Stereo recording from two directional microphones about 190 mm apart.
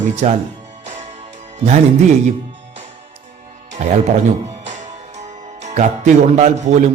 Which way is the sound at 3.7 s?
35° right (ahead or behind).